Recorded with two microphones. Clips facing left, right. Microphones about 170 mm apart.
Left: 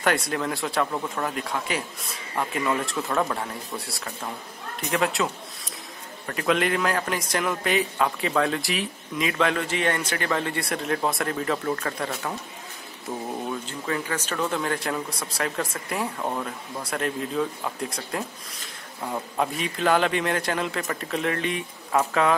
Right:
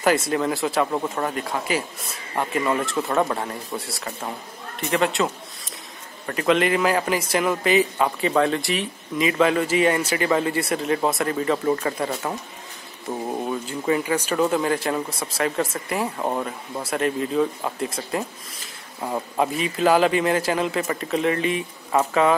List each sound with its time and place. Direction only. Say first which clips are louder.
0.0 s a man's voice: right 4 dB; centre (ahead or behind)
13.5 s a man's voice: right 9 dB; 10° right (ahead or behind)
16.2 s speech: right 4 dB; 20° right (ahead or behind)
16.9 s a man's voice: right 5 dB; centre (ahead or behind)